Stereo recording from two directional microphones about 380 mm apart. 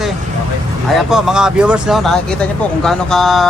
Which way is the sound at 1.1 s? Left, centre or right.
Centre.